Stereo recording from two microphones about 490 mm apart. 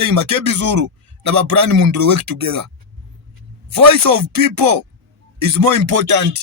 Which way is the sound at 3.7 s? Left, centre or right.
Right.